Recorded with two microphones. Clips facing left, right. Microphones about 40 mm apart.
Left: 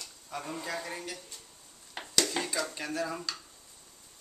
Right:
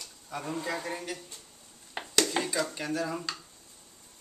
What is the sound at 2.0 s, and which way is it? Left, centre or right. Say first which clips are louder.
Dishes: right 3 dB; centre.